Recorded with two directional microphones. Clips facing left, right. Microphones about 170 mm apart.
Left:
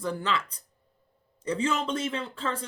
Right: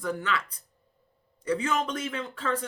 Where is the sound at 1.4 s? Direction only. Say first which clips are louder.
Even; 30° left (ahead or behind).